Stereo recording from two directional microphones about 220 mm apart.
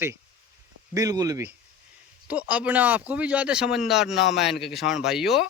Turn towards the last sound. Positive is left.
turn(degrees=0)  # may be behind; listen again after turning